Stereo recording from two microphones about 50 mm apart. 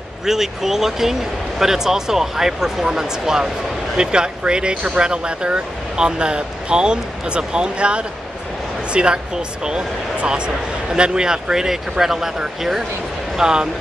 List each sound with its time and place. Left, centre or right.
0.2 s speech: centre